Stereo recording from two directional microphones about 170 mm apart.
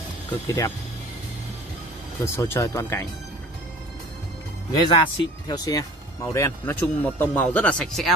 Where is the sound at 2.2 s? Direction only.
15° left (ahead or behind).